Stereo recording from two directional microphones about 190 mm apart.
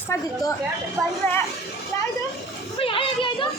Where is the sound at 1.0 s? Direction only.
Centre (ahead or behind).